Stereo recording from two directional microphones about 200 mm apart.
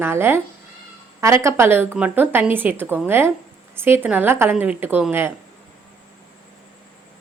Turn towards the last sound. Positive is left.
turn(degrees=-10)  # may be behind; listen again after turning